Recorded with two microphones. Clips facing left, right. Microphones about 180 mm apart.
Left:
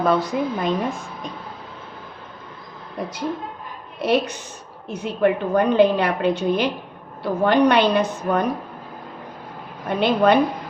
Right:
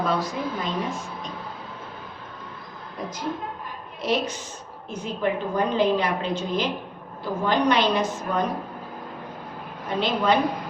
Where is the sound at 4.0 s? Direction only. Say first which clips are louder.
Left 5 dB; 65° left (ahead or behind).